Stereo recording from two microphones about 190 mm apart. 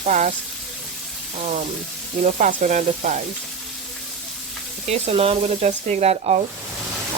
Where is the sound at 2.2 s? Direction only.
40° right (ahead or behind).